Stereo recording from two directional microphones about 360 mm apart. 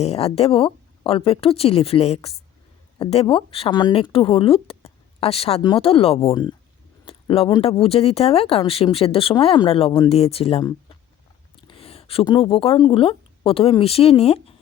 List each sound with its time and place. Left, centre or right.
0.0 s speech: centre